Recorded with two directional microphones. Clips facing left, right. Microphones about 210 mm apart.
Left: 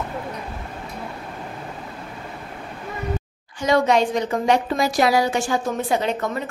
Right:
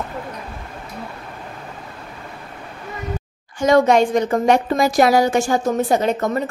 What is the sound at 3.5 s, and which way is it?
A woman's voice, 45° right (ahead or behind).